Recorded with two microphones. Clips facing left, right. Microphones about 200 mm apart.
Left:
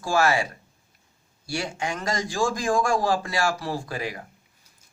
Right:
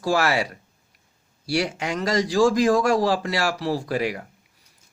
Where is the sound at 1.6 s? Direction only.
40° right (ahead or behind).